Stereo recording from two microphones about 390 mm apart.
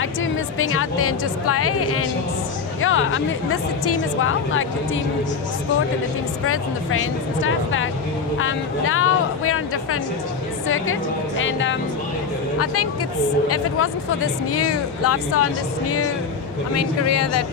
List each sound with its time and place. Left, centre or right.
0.6 s speech: left
6.4 s speech: left
10.7 s speech: left
13.5 s speech: left